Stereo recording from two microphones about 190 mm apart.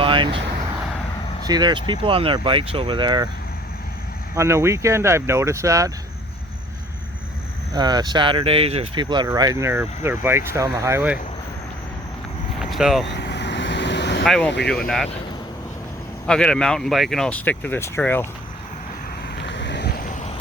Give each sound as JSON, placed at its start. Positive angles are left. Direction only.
{"t": 0.0, "sound": "vehicle", "side_deg": -25}
{"t": 1.5, "sound": "speech", "side_deg": -20}
{"t": 4.4, "sound": "speech", "side_deg": -15}
{"t": 7.7, "sound": "speech", "side_deg": -20}
{"t": 12.7, "sound": "speech", "side_deg": 0}
{"t": 13.1, "sound": "vehicle", "side_deg": 60}
{"t": 14.3, "sound": "speech", "side_deg": 5}
{"t": 16.2, "sound": "speech", "side_deg": 5}
{"t": 19.4, "sound": "a sound", "side_deg": 65}